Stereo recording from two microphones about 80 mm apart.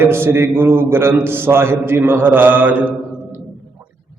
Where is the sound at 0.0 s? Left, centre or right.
Right.